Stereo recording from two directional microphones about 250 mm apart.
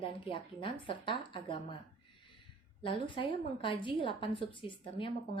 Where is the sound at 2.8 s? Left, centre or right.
Left.